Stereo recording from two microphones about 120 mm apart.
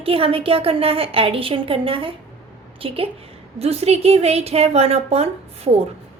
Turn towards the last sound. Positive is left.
turn(degrees=-60)  # may be behind; listen again after turning